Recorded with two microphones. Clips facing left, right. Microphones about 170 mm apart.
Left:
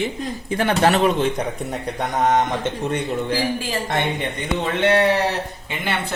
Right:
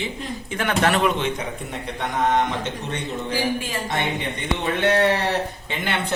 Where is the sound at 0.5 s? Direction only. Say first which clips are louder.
Left 3 dB; 30° left (ahead or behind).